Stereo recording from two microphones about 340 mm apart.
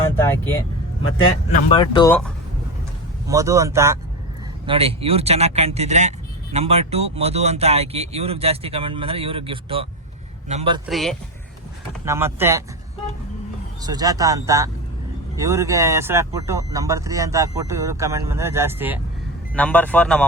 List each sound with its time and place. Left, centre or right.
1.5 s speech: centre
3.2 s speech: centre
10.8 s speech: centre
13.8 s speech: centre
19.5 s speech: centre